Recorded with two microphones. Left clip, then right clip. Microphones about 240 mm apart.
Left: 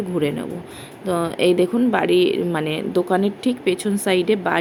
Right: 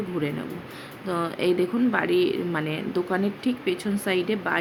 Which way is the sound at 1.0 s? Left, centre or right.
Centre.